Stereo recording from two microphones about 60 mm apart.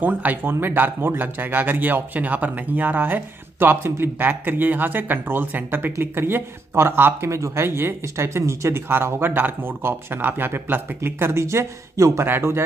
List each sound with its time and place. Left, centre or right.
0.0 s speech: right
7.2 s speech: right